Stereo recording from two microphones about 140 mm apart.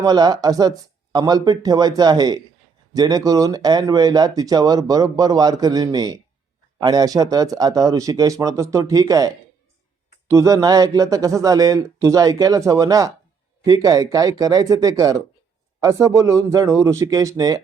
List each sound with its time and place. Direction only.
0.0 s speech: 30° right (ahead or behind)